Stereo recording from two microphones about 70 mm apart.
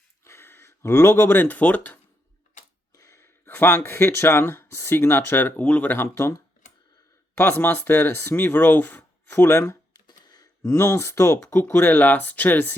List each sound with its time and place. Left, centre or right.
0.3 s speech: left
2.9 s sneeze: left
3.2 s speech: left
6.1 s speech: left
7.3 s speech: left
9.9 s a sound: left
10.6 s speech: left
11.6 s speech: left